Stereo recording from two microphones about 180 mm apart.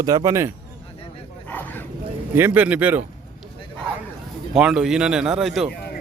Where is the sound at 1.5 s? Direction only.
10° left (ahead or behind).